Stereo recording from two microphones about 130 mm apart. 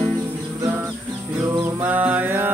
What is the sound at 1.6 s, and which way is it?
Music, 15° right (ahead or behind).